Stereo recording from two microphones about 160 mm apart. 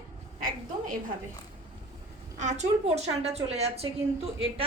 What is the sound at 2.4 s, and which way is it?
A woman's voice, 50° right (ahead or behind).